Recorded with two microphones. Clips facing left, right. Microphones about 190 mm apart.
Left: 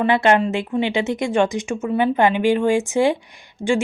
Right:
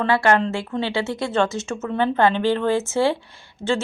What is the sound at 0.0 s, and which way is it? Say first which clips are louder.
Speech: left 2 dB; 20° left (ahead or behind).